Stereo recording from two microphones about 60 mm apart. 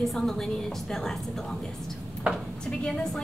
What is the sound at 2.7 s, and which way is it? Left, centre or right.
Speech, centre.